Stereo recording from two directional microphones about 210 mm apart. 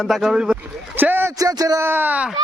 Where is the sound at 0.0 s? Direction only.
Centre (ahead or behind).